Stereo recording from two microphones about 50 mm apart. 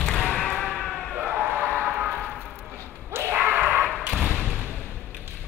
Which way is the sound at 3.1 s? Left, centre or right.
Right.